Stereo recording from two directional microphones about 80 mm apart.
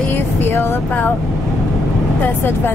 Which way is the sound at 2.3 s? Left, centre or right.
Left.